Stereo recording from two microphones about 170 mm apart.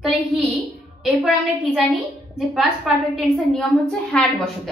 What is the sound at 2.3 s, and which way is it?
A woman's voice, centre (ahead or behind).